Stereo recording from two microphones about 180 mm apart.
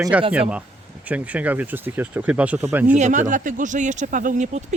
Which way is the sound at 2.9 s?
40° right (ahead or behind).